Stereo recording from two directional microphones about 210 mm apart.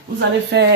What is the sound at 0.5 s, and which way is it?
Speech, 55° right (ahead or behind).